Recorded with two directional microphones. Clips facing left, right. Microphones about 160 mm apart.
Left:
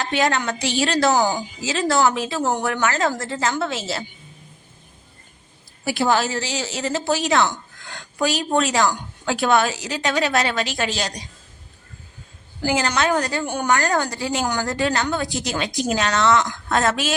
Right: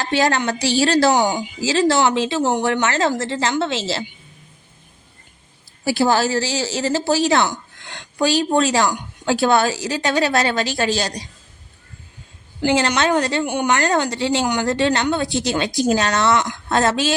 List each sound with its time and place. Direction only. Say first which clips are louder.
0.0 s a woman's voice: right 3 dB; 35° right (ahead or behind)
5.8 s speech: right 3 dB; 35° right (ahead or behind)
12.6 s a woman's voice: right 3 dB; 25° right (ahead or behind)
13.4 s a woman's voice: right 2 dB; 15° right (ahead or behind)